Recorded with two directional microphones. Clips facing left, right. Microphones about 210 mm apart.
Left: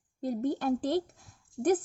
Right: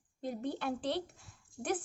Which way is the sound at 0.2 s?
40° left (ahead or behind).